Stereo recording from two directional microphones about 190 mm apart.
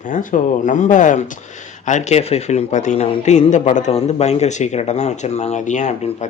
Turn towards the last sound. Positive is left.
turn(degrees=40)  # may be behind; listen again after turning